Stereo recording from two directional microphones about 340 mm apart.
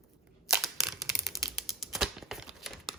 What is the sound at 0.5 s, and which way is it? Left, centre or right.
Typewriter, centre.